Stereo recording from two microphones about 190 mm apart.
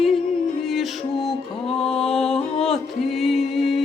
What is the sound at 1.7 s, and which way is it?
Music, 30° left (ahead or behind).